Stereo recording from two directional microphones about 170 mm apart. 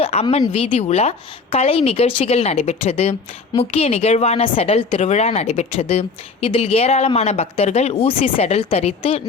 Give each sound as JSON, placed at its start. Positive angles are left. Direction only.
{"t": 0.0, "sound": "speech", "side_deg": 35}